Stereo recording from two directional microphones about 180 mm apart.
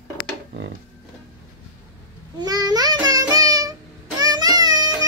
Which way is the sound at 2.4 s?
20° right (ahead or behind).